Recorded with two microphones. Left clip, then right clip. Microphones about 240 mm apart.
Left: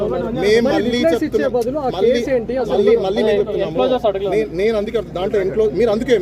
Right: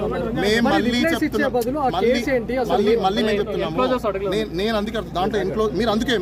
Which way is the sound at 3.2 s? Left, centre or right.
Centre.